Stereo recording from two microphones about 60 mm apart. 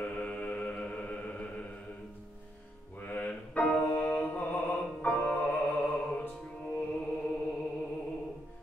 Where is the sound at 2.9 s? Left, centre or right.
Left.